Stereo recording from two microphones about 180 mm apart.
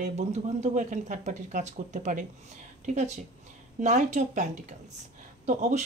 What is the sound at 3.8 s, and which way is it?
Speech, 40° right (ahead or behind).